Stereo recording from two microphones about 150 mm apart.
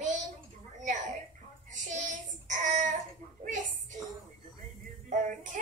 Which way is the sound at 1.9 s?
55° right (ahead or behind).